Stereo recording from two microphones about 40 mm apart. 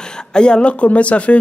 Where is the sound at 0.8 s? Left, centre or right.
Left.